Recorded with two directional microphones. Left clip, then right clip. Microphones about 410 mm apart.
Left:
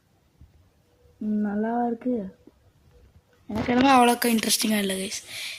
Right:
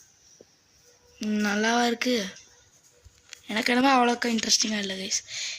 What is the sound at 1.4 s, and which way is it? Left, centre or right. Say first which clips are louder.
Speech: right 4 dB; left.